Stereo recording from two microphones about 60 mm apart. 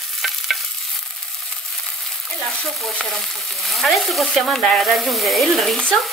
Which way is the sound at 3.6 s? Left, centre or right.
Centre.